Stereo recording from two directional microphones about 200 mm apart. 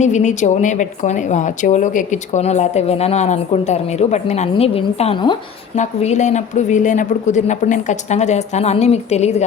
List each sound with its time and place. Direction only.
0.0 s a woman's voice: 35° left (ahead or behind)